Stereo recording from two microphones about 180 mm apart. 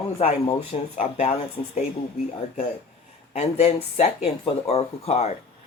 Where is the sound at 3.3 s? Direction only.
35° left (ahead or behind).